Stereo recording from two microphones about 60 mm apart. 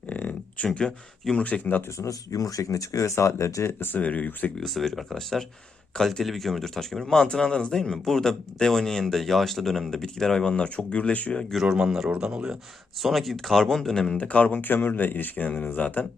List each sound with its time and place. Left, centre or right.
0.1 s a sound: left
1.4 s speech: left
2.0 s speech: left
4.5 s speech: centre
11.5 s speech: centre
14.2 s speech: left